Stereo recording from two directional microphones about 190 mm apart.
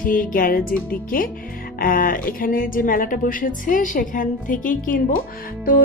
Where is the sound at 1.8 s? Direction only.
50° left (ahead or behind).